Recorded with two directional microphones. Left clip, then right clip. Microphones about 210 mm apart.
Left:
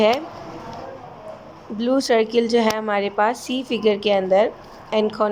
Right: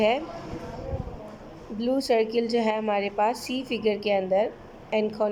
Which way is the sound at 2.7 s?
40° left (ahead or behind).